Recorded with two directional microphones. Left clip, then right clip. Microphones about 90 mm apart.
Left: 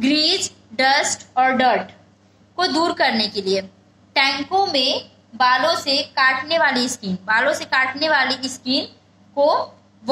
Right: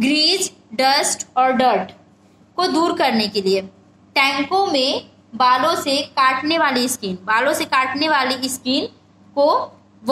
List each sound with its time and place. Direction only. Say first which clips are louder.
0.0 s a woman's voice: right 1 dB; 40° right (ahead or behind)